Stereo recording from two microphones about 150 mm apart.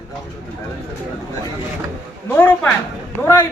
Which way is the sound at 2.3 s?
10° left (ahead or behind).